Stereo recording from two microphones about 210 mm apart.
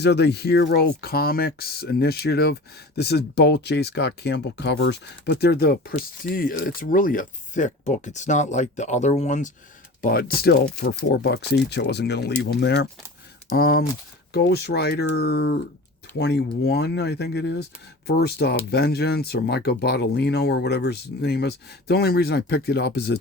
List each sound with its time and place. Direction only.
0.0 s speech: 55° left (ahead or behind); by 9.5 s 35° left (ahead or behind)
10.0 s speech: 45° left (ahead or behind)